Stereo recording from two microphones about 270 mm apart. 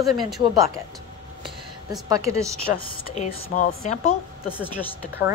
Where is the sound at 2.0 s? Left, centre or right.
Centre.